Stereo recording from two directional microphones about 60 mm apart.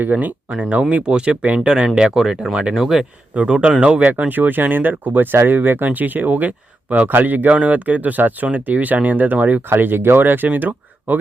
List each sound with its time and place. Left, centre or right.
0.0 s speech: right